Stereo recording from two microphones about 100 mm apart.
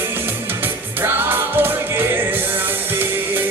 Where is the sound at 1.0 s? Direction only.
20° right (ahead or behind).